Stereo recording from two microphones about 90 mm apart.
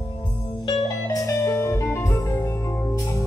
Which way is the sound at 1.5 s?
35° left (ahead or behind).